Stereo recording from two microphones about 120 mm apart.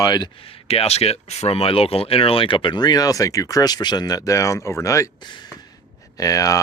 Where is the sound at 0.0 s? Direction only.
35° left (ahead or behind).